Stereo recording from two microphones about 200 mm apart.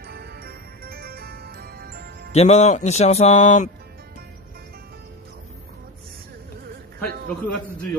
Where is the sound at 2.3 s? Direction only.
35° left (ahead or behind).